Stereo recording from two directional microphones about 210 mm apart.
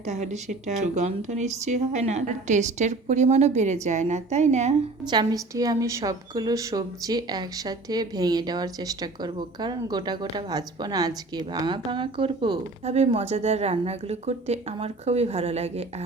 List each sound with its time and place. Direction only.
0.1 s a woman's voice: 35° right (ahead or behind)
5.1 s a woman's voice: 15° right (ahead or behind)